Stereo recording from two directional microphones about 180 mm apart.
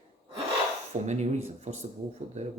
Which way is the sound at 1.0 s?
40° right (ahead or behind).